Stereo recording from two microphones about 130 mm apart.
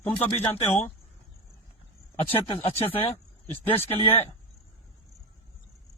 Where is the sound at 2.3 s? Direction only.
50° left (ahead or behind).